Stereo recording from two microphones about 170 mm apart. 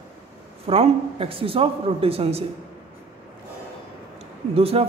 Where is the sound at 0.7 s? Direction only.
35° right (ahead or behind).